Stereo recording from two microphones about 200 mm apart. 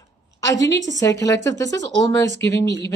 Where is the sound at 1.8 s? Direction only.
65° right (ahead or behind).